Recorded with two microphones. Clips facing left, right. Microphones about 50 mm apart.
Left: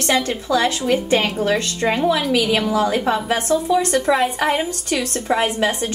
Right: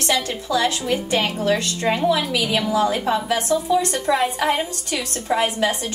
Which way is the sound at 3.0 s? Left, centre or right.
Centre.